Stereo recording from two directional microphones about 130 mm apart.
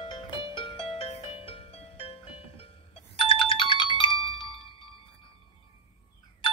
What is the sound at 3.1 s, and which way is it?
Ringtone, 40° left (ahead or behind).